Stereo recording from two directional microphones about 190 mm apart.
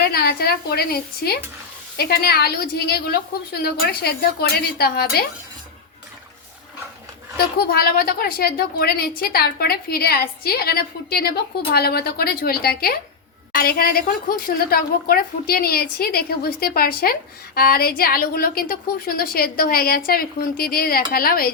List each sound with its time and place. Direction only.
0.0 s a woman's voice: 55° left (ahead or behind)
7.3 s a woman's voice: 55° left (ahead or behind)